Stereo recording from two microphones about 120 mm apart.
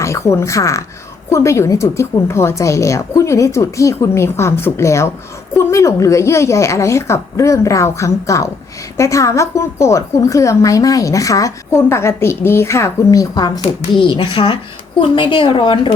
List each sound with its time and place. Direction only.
0.0 s a woman's voice: 25° left (ahead or behind)
14.1 s a woman's voice: 40° left (ahead or behind)